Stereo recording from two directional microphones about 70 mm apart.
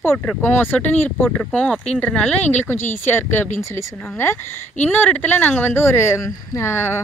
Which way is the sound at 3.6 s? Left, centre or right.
Left.